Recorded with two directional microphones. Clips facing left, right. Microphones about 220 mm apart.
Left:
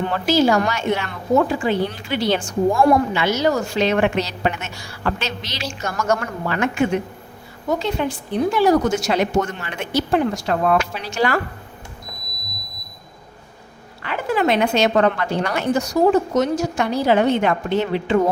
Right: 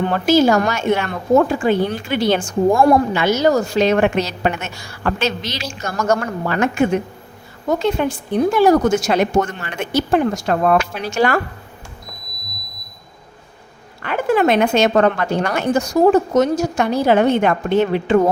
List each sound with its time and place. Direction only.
0.1 s speech: 50° right (ahead or behind)
5.8 s speech: 35° right (ahead or behind)
14.0 s speech: 50° right (ahead or behind)